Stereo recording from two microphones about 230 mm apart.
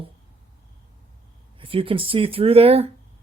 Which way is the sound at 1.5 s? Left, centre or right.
Right.